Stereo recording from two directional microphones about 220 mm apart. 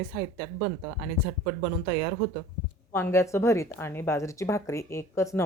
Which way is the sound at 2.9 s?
10° left (ahead or behind).